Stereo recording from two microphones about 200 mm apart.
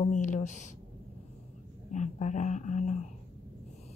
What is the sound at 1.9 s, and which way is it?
A man's voice, 35° left (ahead or behind).